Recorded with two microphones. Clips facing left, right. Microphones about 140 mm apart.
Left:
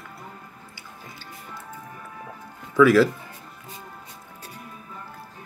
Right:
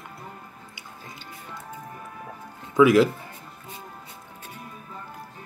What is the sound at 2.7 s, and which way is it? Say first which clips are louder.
Speech: even; 20° right (ahead or behind).